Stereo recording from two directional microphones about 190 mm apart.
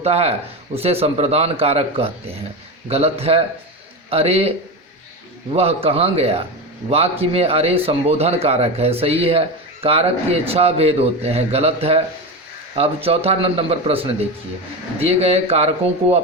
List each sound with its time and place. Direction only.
0.0 s speech: 35° right (ahead or behind)
5.5 s speech: 30° right (ahead or behind)